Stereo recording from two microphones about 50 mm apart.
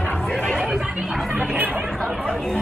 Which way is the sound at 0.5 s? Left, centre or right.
Centre.